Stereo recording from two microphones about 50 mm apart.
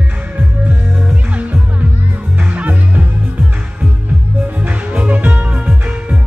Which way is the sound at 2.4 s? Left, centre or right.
Right.